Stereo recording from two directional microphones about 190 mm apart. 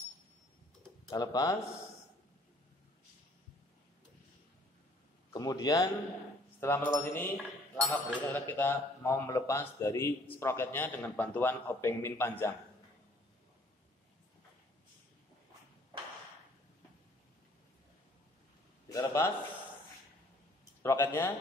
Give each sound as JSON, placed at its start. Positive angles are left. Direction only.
{"t": 1.1, "sound": "speech", "side_deg": 20}
{"t": 5.3, "sound": "speech", "side_deg": 20}
{"t": 18.9, "sound": "a man's voice", "side_deg": 15}
{"t": 20.8, "sound": "speech", "side_deg": 15}